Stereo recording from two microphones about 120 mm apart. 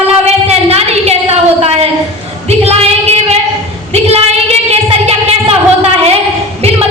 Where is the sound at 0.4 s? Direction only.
60° right (ahead or behind).